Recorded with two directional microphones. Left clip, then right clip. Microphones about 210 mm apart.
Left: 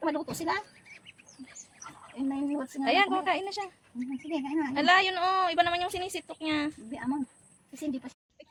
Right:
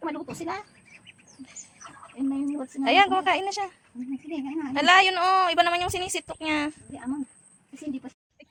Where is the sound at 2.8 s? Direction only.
10° right (ahead or behind).